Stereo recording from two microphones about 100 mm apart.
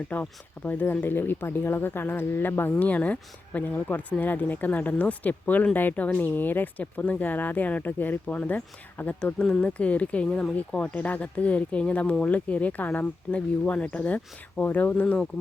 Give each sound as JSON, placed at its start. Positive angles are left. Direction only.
{"t": 0.1, "sound": "speech", "side_deg": 15}